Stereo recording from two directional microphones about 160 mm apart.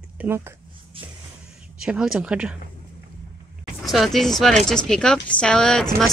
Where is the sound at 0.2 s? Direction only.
15° right (ahead or behind).